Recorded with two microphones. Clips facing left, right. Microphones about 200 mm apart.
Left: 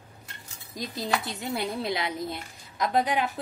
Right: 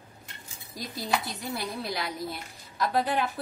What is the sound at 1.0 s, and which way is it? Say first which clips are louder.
A woman's voice: left 1 dB; 20° left (ahead or behind).